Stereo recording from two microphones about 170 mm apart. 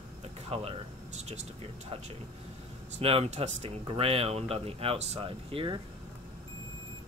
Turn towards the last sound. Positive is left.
turn(degrees=-30)  # may be behind; listen again after turning